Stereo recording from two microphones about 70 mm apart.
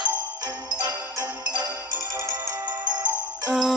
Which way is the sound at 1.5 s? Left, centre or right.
Right.